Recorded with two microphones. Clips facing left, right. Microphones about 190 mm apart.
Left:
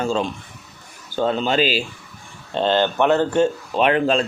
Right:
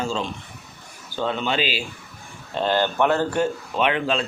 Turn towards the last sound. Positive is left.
turn(degrees=40)  # may be behind; listen again after turning